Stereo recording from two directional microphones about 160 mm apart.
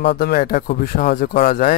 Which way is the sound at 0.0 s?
85° left.